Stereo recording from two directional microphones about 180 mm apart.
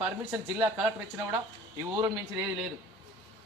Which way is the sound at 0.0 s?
10° right (ahead or behind).